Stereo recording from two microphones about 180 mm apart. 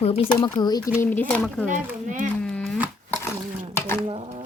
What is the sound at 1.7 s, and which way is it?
Speech, 45° right (ahead or behind).